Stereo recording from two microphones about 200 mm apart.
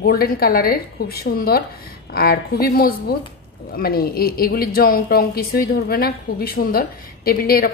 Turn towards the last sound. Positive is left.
turn(degrees=50)  # may be behind; listen again after turning